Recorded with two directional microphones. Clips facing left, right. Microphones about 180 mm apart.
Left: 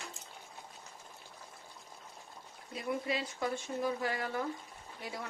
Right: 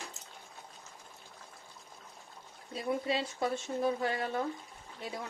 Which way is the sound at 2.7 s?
30° right (ahead or behind).